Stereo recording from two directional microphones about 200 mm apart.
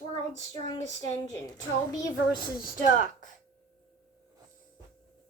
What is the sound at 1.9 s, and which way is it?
Speech, 15° left (ahead or behind).